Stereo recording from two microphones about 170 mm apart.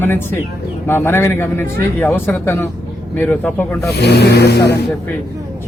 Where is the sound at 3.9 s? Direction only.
80° left.